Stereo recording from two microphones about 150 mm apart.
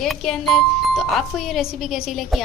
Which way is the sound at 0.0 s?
Centre (ahead or behind).